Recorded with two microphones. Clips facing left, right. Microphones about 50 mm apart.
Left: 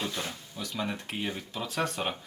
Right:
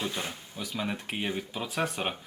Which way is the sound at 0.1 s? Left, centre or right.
Right.